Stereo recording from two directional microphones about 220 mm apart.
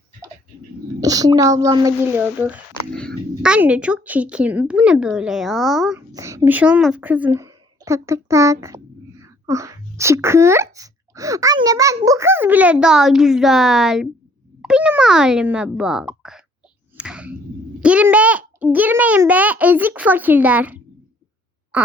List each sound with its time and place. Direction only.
1.0 s a child's voice: 15° right (ahead or behind); by 6.0 s centre (ahead or behind)
6.1 s a woman's voice: 15° right (ahead or behind)
17.0 s a sound: 5° right (ahead or behind)
17.7 s a child's voice: 5° right (ahead or behind)
21.7 s fart: 5° right (ahead or behind)